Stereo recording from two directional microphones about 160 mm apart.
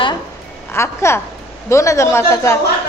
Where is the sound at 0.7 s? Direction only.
15° left (ahead or behind).